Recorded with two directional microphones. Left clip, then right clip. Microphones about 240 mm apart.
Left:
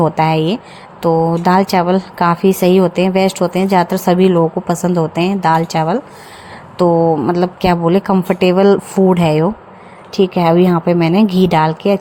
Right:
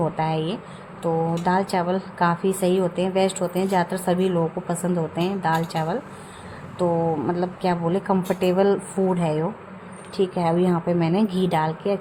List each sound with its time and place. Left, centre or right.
0.0 s speech: left